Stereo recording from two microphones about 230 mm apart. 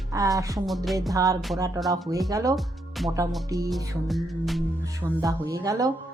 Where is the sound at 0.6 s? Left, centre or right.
Centre.